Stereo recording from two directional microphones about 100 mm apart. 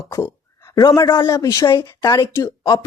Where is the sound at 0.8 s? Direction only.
45° left (ahead or behind).